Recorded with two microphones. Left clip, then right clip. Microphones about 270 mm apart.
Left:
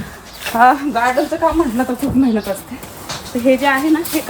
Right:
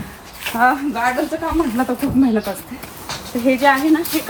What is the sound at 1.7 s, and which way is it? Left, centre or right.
Speech, centre.